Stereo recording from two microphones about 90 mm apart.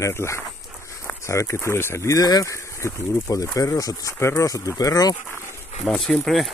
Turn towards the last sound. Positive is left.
turn(degrees=0)  # may be behind; listen again after turning